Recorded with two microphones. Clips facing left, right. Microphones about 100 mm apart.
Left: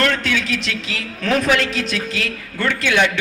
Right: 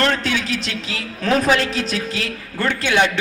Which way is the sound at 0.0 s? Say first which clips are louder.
Even; 35° right (ahead or behind).